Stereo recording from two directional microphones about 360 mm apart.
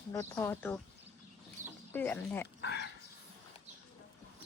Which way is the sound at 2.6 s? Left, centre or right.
Left.